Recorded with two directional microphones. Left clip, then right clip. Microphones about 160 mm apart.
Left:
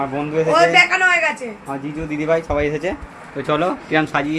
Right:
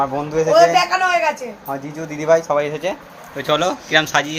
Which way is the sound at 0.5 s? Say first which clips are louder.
Even; 5° right (ahead or behind).